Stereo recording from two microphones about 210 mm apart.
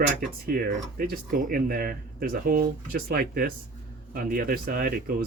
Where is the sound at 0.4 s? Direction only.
45° right (ahead or behind).